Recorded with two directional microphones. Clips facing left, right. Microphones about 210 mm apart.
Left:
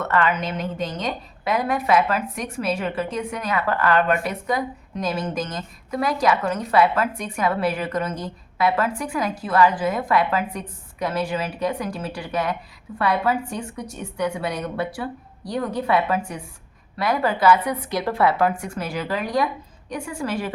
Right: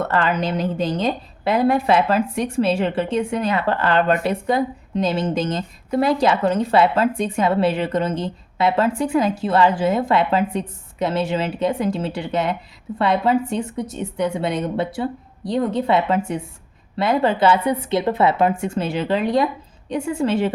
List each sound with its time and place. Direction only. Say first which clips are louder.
0.0 s a woman's voice: right 2 dB; 30° right (ahead or behind)